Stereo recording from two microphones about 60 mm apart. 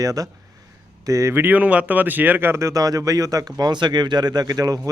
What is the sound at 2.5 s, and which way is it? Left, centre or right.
Speech, right.